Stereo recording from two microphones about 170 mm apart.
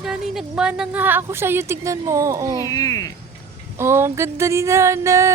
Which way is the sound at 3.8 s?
15° right (ahead or behind).